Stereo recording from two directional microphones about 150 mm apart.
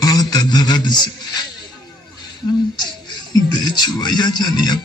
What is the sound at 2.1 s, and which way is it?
Music, 25° left (ahead or behind).